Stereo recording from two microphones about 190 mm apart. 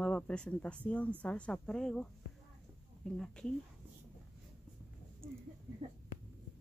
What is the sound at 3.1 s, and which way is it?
Speech, 5° left (ahead or behind).